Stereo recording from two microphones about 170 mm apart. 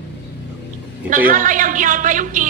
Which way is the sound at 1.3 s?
50° right (ahead or behind).